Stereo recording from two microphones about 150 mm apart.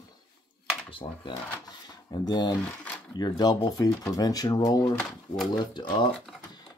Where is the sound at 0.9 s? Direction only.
35° left (ahead or behind).